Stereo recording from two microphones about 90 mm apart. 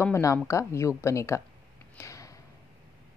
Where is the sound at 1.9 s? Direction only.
35° left (ahead or behind).